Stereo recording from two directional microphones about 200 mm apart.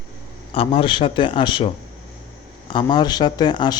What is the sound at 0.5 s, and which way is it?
Speech, 30° left (ahead or behind).